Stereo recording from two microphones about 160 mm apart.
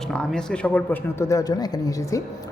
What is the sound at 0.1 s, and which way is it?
A woman's voice, 5° left (ahead or behind).